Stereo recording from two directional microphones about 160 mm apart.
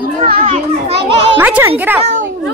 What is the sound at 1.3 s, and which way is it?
Speech, 10° right (ahead or behind).